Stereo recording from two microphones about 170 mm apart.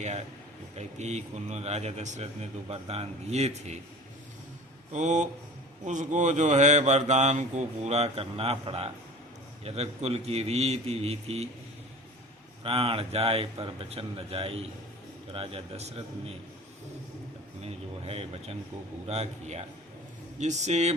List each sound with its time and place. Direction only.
0.0 s a man's voice: 40° right (ahead or behind)
4.9 s a man's voice: 45° right (ahead or behind)
12.6 s a man's voice: 35° right (ahead or behind)
17.6 s a sound: 35° right (ahead or behind)
19.0 s a man's voice: 40° right (ahead or behind)